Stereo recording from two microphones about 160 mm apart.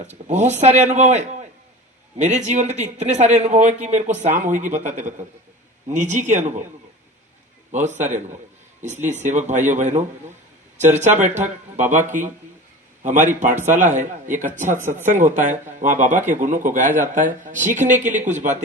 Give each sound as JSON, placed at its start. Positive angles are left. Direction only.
{"t": 0.3, "sound": "a man's voice", "side_deg": -45}
{"t": 7.7, "sound": "a man's voice", "side_deg": -50}